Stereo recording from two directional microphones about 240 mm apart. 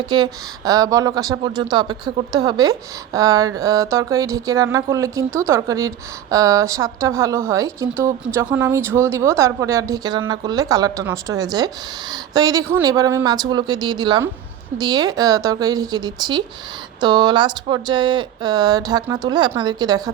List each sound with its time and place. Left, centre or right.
0.0 s speech: centre